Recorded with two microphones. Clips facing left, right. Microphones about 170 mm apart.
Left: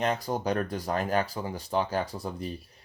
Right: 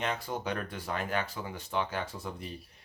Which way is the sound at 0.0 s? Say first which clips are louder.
Left 6 dB; 40° left (ahead or behind).